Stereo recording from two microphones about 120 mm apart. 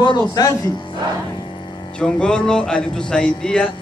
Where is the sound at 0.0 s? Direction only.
40° left (ahead or behind).